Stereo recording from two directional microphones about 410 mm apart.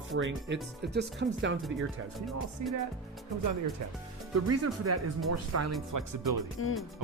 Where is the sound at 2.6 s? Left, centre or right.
Right.